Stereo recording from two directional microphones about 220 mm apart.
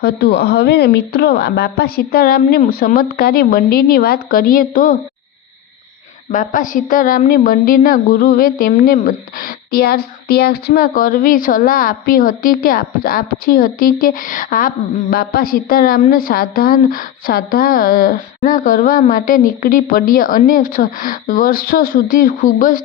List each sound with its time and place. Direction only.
0.0 s a woman's voice: 50° left (ahead or behind)
6.3 s a woman's voice: 35° left (ahead or behind)